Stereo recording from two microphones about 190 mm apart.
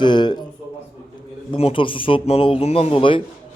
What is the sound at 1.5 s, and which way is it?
Speech, 30° left (ahead or behind).